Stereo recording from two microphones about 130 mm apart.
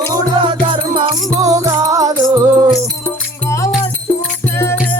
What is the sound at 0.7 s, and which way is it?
Music, 40° right (ahead or behind).